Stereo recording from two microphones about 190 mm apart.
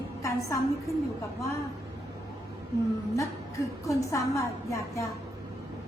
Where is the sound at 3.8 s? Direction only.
15° left (ahead or behind).